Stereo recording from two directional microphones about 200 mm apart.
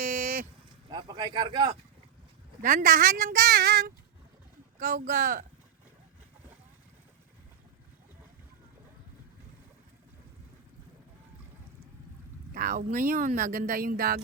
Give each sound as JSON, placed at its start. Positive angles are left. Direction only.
{"t": 0.0, "sound": "vehicle", "side_deg": -45}
{"t": 0.9, "sound": "speech", "side_deg": -25}
{"t": 2.6, "sound": "speech", "side_deg": -45}
{"t": 12.5, "sound": "speech", "side_deg": -45}